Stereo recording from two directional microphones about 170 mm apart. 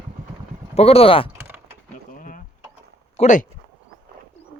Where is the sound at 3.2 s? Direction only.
45° left (ahead or behind).